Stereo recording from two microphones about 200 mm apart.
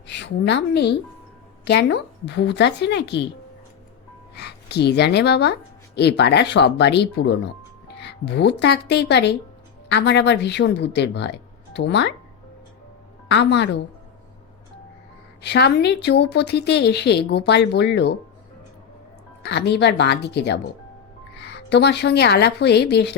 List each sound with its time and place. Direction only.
0.1 s a woman's voice: 60° left (ahead or behind)
4.4 s a woman's voice: 55° left (ahead or behind)
13.2 s a woman's voice: 60° left (ahead or behind)
15.4 s a woman's voice: 55° left (ahead or behind)
19.4 s a woman's voice: 55° left (ahead or behind)